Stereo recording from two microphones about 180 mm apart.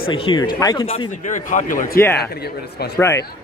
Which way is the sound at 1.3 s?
45° left (ahead or behind).